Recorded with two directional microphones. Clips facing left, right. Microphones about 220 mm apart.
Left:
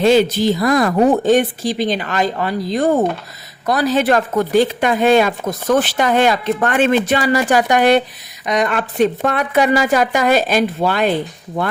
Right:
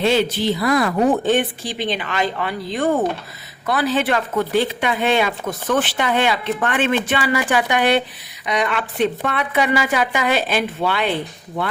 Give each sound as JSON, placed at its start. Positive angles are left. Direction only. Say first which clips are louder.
{"t": 0.0, "sound": "speech", "louder": "left 5 dB", "side_deg": 45}